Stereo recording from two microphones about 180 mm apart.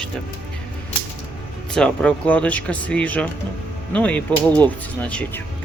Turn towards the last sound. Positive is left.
turn(degrees=10)  # may be behind; listen again after turning